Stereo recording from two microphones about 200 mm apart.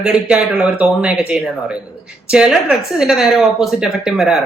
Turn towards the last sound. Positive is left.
turn(degrees=0)  # may be behind; listen again after turning